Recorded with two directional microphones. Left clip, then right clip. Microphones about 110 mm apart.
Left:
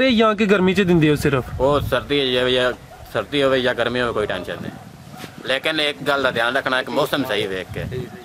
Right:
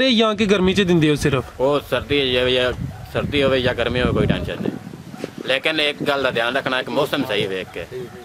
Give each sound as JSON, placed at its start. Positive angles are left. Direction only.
{"t": 0.0, "sound": "speech", "side_deg": 15}